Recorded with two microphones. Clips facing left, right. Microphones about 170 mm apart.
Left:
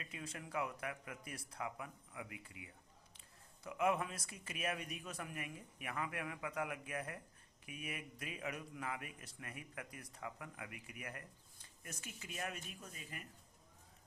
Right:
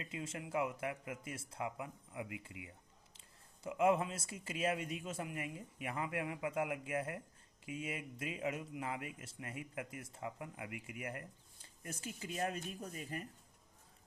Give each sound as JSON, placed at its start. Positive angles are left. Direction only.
{"t": 0.0, "sound": "speech", "side_deg": -25}